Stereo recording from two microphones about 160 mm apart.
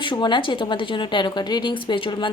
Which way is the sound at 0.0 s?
30° left (ahead or behind).